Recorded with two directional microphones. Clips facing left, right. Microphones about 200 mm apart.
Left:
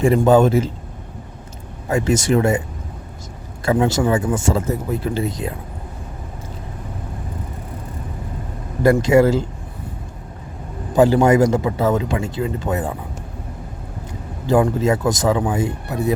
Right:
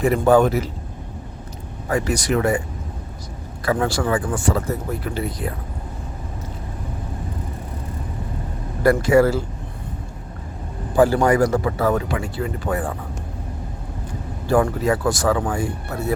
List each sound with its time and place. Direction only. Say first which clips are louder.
0.0 s speech: left 2 dB; 25° left (ahead or behind)
1.9 s speech: left 4 dB; 25° left (ahead or behind)
3.7 s speech: left 3 dB; 20° left (ahead or behind)
8.8 s speech: left 2 dB; 20° left (ahead or behind)
10.9 s speech: left 3 dB; 20° left (ahead or behind)
14.4 s speech: left 2 dB; 20° left (ahead or behind)